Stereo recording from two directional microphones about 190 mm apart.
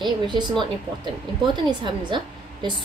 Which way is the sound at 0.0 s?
25° right (ahead or behind).